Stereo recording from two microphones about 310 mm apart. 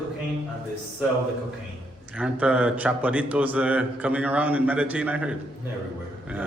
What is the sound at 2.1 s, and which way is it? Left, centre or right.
A man's voice, centre.